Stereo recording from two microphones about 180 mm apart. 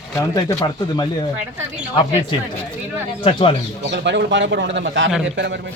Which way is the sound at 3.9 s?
75° right (ahead or behind).